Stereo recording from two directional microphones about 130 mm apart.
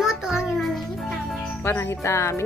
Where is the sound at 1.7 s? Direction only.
20° left (ahead or behind).